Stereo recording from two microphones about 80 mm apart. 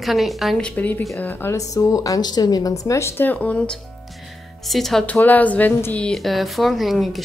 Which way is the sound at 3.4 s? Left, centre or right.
Centre.